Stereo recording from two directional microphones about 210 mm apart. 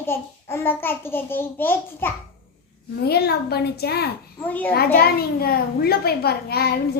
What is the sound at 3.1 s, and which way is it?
A child's voice, 50° left (ahead or behind).